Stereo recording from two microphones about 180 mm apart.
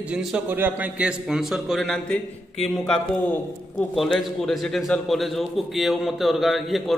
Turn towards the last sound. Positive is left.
turn(degrees=0)  # may be behind; listen again after turning